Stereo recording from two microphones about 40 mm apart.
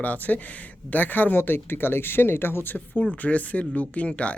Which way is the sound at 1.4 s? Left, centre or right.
Left.